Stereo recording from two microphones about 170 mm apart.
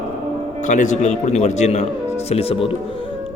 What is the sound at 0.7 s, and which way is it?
A man's voice, 45° left (ahead or behind).